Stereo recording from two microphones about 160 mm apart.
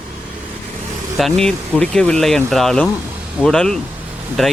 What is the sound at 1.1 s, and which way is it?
Speech, 5° left (ahead or behind).